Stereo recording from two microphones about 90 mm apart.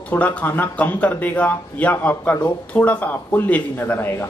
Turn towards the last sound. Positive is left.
turn(degrees=20)  # may be behind; listen again after turning